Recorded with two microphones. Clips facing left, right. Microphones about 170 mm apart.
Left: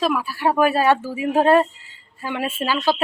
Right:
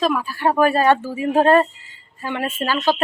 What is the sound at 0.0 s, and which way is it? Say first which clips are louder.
Speech: right 1 dB; 10° left (ahead or behind).